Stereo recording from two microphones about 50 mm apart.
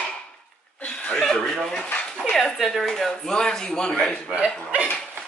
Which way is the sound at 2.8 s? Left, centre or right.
Centre.